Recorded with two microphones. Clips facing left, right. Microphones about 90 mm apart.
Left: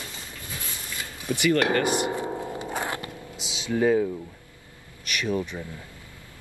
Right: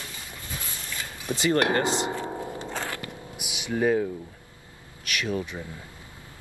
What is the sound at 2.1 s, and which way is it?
Music, 15° left (ahead or behind).